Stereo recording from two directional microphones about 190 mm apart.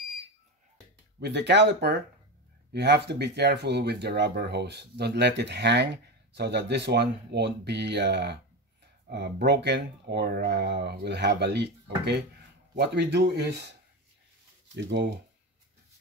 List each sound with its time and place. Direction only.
1.2 s speech: 65° right (ahead or behind)
14.8 s speech: 65° right (ahead or behind)